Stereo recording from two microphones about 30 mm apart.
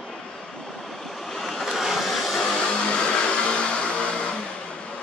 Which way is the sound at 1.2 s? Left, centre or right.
Centre.